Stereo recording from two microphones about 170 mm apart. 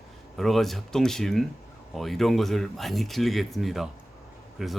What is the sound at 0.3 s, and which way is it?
Speech, centre (ahead or behind).